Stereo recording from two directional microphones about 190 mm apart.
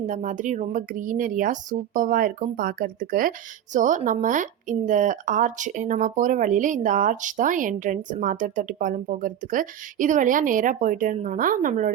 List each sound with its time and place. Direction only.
0.1 s speech: 40° right (ahead or behind)